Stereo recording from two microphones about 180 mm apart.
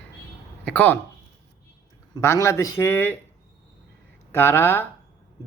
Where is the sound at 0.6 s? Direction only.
10° left (ahead or behind).